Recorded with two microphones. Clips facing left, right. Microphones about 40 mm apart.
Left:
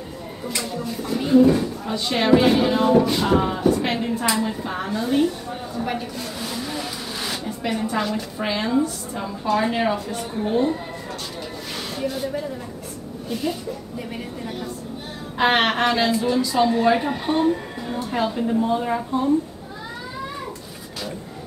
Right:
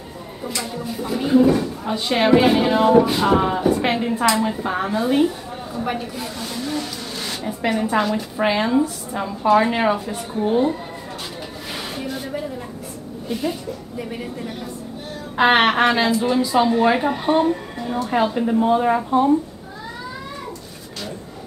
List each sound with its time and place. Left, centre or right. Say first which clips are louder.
0.6 s music: right 1 dB; centre
6.4 s vehicle: right 3 dB; centre
7.4 s music: right 6 dB; centre
8.4 s a woman's voice: right 4 dB; right
11.7 s a sound: left 1 dB; centre
13.3 s a woman's voice: right 1 dB; centre
15.3 s music: right 4 dB; centre
18.1 s a woman's voice: right 3 dB; right